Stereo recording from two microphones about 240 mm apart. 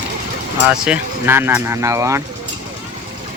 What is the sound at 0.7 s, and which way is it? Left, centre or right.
Speech, centre.